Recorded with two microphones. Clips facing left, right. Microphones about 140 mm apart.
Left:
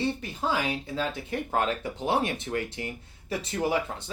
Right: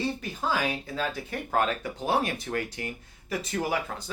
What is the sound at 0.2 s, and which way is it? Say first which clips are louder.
Speech: even; 25° left (ahead or behind).